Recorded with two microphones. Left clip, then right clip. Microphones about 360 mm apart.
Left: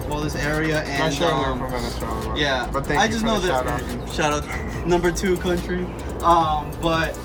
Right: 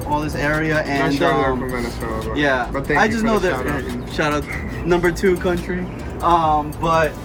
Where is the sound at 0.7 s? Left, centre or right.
Centre.